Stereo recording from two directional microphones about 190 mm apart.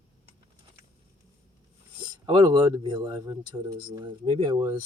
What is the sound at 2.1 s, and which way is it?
Speech, 25° right (ahead or behind).